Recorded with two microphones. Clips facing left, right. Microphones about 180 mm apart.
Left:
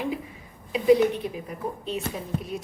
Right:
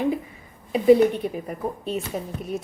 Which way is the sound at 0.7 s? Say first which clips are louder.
Right 3 dB; 50° right (ahead or behind).